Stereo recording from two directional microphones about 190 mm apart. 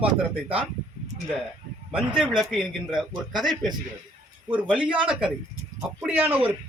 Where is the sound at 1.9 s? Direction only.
5° right (ahead or behind).